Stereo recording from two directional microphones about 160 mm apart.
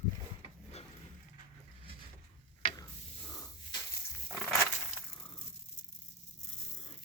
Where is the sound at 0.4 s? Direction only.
40° left (ahead or behind).